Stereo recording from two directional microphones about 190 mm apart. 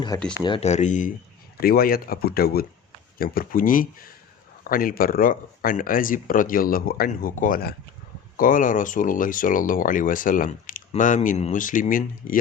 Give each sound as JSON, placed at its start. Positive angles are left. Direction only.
{"t": 0.4, "sound": "speech", "side_deg": 30}
{"t": 1.5, "sound": "speech", "side_deg": 50}